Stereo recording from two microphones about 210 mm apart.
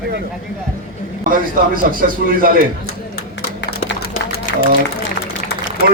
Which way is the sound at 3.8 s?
45° left (ahead or behind).